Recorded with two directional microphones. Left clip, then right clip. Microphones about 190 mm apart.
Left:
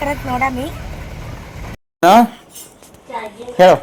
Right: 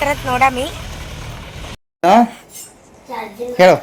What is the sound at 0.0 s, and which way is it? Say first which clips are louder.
Speech: right 4 dB; 10° right (ahead or behind).